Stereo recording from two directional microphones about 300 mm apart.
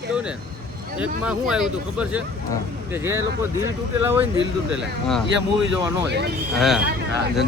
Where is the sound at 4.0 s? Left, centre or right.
Centre.